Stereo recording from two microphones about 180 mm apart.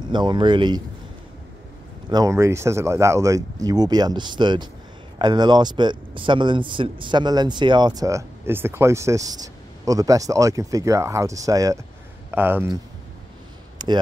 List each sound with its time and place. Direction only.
0.1 s a man's voice: 25° right (ahead or behind)
2.0 s a man's voice: 20° right (ahead or behind)
13.8 s a sound: 25° right (ahead or behind)